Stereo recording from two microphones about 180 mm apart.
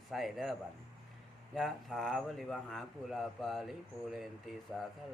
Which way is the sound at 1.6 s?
Centre (ahead or behind).